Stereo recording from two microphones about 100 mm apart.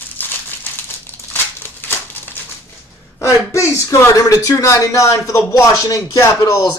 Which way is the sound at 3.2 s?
30° left (ahead or behind).